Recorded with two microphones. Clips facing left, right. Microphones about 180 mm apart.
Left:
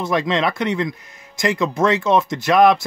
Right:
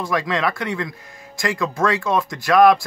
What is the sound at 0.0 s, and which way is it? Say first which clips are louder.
Speech: left 2 dB; 20° left (ahead or behind).